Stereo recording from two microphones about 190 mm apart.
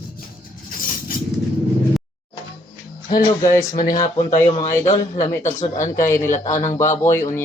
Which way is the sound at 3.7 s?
45° left (ahead or behind).